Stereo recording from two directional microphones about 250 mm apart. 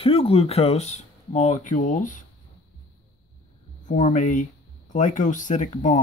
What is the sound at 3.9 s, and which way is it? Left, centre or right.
Speech, left.